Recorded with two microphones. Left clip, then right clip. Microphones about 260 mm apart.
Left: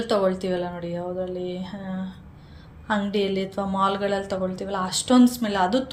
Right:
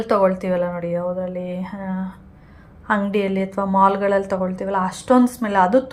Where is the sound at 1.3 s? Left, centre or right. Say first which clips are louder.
Right 3 dB; right.